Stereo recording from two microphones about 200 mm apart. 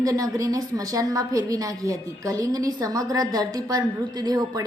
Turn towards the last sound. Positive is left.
turn(degrees=-20)  # may be behind; listen again after turning